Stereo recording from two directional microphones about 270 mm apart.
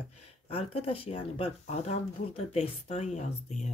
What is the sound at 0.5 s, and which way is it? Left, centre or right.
Speech, left.